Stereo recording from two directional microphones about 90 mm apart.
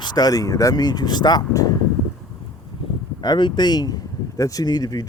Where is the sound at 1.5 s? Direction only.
40° left (ahead or behind).